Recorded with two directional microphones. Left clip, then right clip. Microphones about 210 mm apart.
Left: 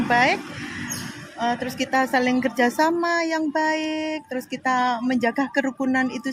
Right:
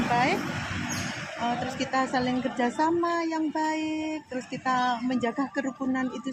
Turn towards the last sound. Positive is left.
turn(degrees=45)  # may be behind; listen again after turning